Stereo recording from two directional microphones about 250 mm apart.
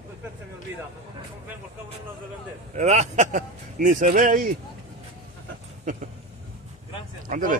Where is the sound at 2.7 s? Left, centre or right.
Right.